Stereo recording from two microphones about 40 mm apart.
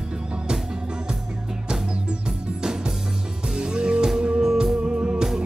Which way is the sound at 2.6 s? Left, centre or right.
Centre.